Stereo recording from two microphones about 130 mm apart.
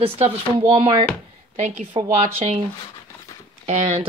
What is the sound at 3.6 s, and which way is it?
Speech, 55° right (ahead or behind).